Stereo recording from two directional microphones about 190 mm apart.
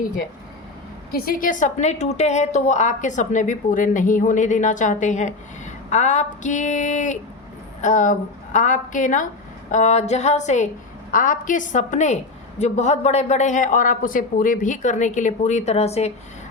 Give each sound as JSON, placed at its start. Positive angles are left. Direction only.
{"t": 1.1, "sound": "a woman's voice", "side_deg": 50}